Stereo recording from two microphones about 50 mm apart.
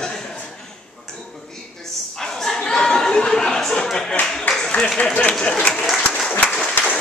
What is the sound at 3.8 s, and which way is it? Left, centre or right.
Clapping, centre.